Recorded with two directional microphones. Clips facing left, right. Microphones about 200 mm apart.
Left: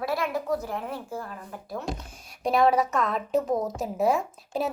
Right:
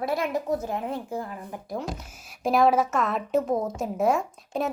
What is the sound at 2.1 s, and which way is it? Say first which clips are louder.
A woman's voice: right 2 dB; 5° right (ahead or behind).